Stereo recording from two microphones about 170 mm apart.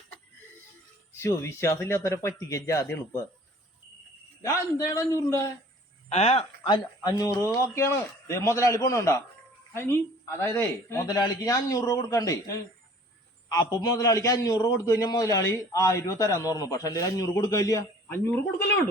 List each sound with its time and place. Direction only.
1.1 s speech: 15° left (ahead or behind)
4.4 s a man's voice: 20° left (ahead or behind)
6.1 s speech: 40° left (ahead or behind)
6.7 s a man's voice: 25° left (ahead or behind)